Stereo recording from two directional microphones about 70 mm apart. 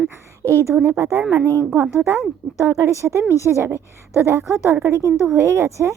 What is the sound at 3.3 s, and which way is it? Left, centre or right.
Speech, left.